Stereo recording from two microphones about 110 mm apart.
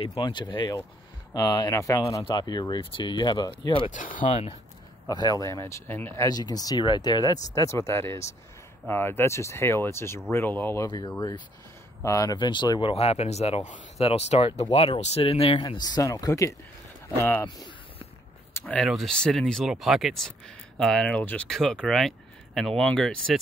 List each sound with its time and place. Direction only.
0.0 s speech: 50° left (ahead or behind); by 2.2 s 30° left (ahead or behind)
2.2 s speech: 40° left (ahead or behind); by 4.6 s 65° left (ahead or behind)
5.0 s speech: 35° left (ahead or behind); by 6.2 s 20° left (ahead or behind)
6.2 s speech: 35° left (ahead or behind)
7.5 s speech: 25° left (ahead or behind)
10.9 s speech: 40° left (ahead or behind)
12.4 s speech: 45° left (ahead or behind)
12.9 s speech: 70° left (ahead or behind)
15.6 s speech: 40° left (ahead or behind); by 17.5 s 20° left (ahead or behind)
18.5 s a sound: 15° left (ahead or behind)
18.9 s speech: centre (ahead or behind)